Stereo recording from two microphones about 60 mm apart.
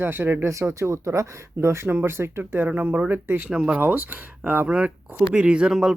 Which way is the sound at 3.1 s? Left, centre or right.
Right.